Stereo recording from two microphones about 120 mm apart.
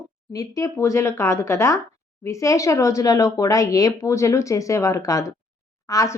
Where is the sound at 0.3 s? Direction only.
25° left (ahead or behind).